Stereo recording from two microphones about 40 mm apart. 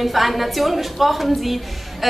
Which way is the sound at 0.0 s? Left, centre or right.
Centre.